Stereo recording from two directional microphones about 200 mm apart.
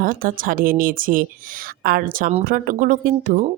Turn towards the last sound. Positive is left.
turn(degrees=-45)  # may be behind; listen again after turning